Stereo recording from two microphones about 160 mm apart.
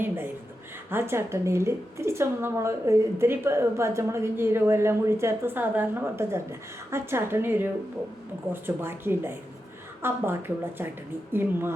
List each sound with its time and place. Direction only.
0.9 s a woman's voice: 15° right (ahead or behind)